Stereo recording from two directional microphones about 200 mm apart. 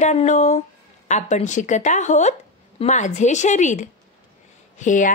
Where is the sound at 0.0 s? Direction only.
35° left (ahead or behind).